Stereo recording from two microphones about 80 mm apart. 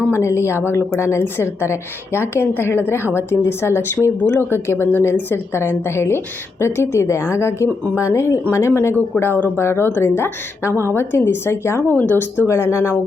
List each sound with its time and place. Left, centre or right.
0.1 s a woman's voice: left